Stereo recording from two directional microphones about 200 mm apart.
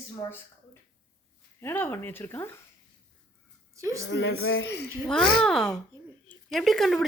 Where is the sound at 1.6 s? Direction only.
10° left (ahead or behind).